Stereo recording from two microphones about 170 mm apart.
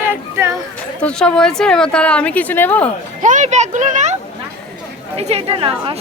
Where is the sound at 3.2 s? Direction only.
50° right (ahead or behind).